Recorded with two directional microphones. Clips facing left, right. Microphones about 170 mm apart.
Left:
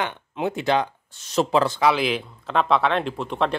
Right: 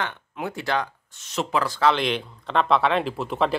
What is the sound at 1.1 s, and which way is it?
Speech, 35° left (ahead or behind).